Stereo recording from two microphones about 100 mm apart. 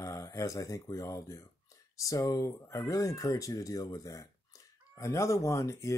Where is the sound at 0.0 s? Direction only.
35° left (ahead or behind).